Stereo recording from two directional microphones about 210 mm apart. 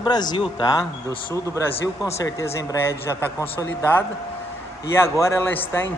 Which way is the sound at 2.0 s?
15° left (ahead or behind).